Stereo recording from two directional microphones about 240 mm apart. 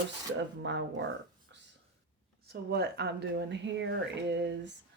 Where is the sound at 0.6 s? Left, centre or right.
Right.